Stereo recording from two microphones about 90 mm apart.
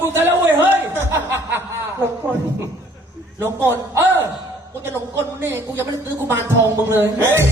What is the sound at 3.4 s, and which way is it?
A man's voice, 25° right (ahead or behind).